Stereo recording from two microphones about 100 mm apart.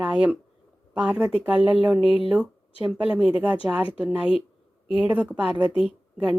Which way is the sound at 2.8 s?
10° right (ahead or behind).